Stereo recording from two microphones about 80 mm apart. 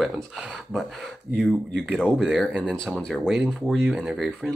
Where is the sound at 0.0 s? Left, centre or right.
Centre.